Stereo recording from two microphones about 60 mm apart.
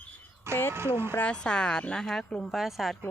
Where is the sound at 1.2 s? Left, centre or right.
Centre.